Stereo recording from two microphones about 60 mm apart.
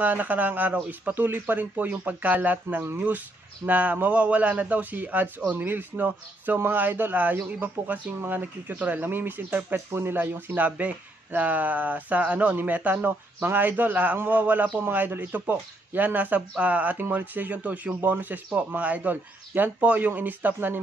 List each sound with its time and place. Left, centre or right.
0.0 s speech: right